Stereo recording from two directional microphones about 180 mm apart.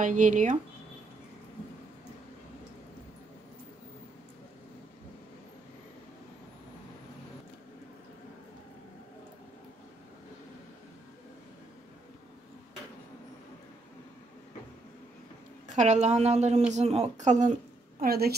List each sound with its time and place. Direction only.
0.0 s speech: 45° right (ahead or behind)
15.7 s a woman's voice: 40° right (ahead or behind)
18.0 s a woman's voice: 60° right (ahead or behind)